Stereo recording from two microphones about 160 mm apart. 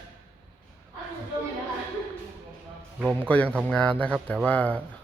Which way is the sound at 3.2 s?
10° left (ahead or behind).